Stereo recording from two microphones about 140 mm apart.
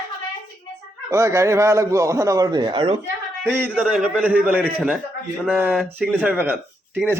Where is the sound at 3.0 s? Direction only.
15° right (ahead or behind).